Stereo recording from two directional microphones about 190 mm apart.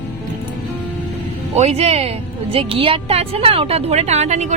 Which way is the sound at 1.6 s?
35° right (ahead or behind).